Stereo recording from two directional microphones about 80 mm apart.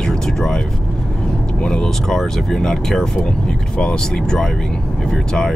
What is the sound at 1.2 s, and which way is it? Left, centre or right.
Speech, centre.